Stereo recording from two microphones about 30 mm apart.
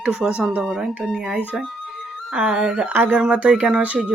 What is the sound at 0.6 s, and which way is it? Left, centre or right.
Speech, centre.